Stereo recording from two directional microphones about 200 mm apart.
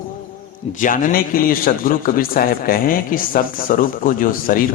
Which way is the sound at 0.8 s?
40° left (ahead or behind).